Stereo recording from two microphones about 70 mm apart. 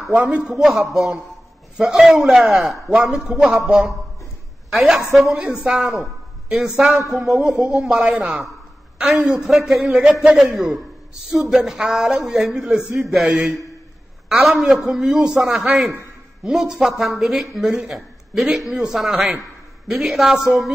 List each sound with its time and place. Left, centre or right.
0.1 s a man's voice: centre
0.5 s a man's voice: centre